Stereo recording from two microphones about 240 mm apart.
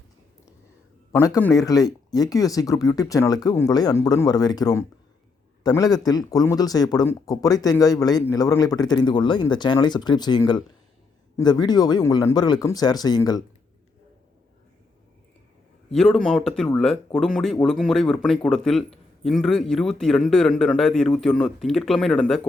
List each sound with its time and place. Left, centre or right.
1.1 s speech: centre
15.9 s a man's voice: centre